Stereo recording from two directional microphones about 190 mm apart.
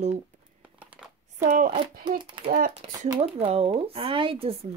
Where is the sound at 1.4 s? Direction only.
40° right (ahead or behind).